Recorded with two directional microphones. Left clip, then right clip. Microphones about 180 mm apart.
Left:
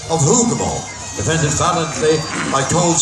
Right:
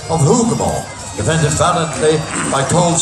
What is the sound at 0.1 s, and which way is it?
Speech, 5° left (ahead or behind).